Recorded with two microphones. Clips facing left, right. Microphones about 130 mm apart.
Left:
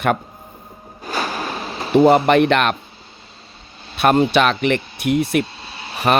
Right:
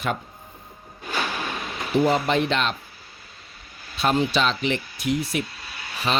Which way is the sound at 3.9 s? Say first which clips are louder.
Left 7 dB; 60° left (ahead or behind).